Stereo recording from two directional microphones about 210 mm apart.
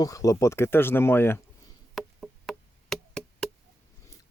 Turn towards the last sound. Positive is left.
turn(degrees=0)  # may be behind; listen again after turning